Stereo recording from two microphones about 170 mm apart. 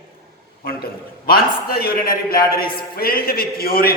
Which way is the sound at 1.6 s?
65° left (ahead or behind).